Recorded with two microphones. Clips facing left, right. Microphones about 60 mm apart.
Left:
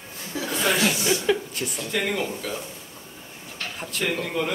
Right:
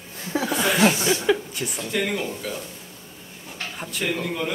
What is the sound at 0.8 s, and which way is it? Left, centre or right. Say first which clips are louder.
Speech: right 4 dB; right.